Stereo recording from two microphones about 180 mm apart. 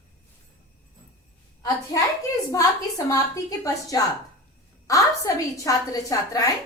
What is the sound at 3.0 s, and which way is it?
A woman's voice, 20° left (ahead or behind).